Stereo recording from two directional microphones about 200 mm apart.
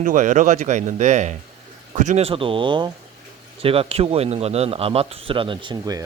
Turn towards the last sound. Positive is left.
turn(degrees=-20)  # may be behind; listen again after turning